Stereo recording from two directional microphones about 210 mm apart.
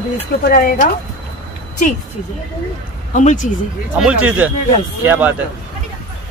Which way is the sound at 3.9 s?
5° right (ahead or behind).